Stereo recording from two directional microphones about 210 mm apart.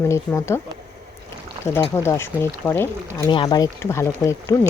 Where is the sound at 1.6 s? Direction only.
10° left (ahead or behind).